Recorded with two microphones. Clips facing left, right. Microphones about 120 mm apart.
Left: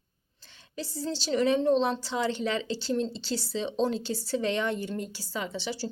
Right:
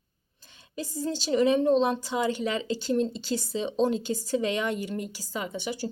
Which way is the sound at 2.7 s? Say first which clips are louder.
Right 2 dB; 50° right (ahead or behind).